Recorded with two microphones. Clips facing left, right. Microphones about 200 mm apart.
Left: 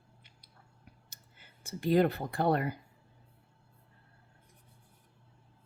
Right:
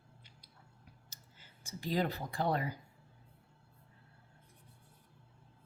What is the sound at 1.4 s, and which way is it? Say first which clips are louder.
Speech: left 6 dB; 60° left (ahead or behind).